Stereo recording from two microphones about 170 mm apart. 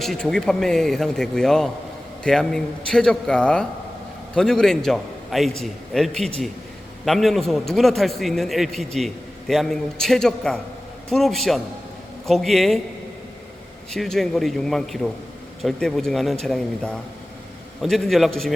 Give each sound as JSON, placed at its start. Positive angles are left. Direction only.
{"t": 0.0, "sound": "a man's voice", "side_deg": 5}
{"t": 13.9, "sound": "a man's voice", "side_deg": 0}